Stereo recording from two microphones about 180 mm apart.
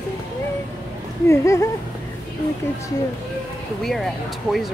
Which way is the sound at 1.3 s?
15° left (ahead or behind).